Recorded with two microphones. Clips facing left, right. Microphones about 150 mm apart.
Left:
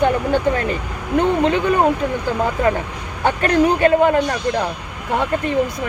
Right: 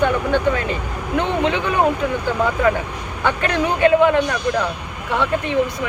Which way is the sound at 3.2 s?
40° left (ahead or behind).